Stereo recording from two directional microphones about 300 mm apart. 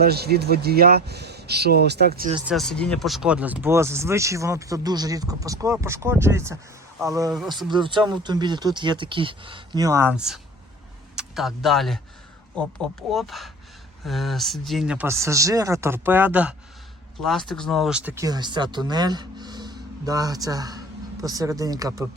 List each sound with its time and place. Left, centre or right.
0.0 s speech: right
2.5 s speech: centre